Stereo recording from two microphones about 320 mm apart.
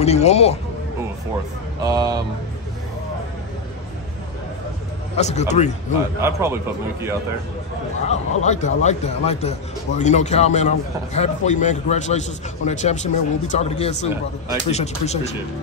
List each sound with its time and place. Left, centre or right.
0.0 s a man's voice: centre
1.8 s speech: centre
5.1 s a man's voice: left
6.2 s speech: centre
8.1 s a man's voice: left